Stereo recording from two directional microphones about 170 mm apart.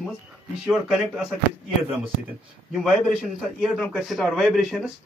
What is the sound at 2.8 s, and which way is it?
A man's voice, 5° right (ahead or behind).